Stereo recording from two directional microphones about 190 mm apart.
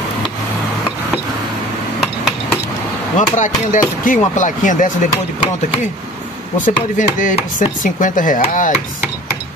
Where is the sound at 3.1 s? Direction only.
40° left (ahead or behind).